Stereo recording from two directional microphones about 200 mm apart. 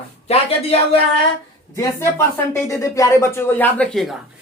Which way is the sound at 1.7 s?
15° left (ahead or behind).